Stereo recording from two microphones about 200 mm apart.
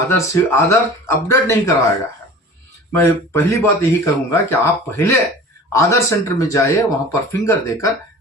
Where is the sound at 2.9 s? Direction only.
15° left (ahead or behind).